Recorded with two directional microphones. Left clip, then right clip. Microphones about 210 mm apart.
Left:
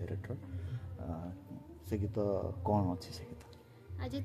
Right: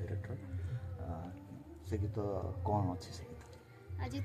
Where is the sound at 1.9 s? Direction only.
55° left (ahead or behind).